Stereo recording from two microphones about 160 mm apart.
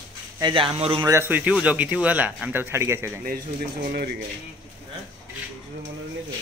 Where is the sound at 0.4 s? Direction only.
30° right (ahead or behind).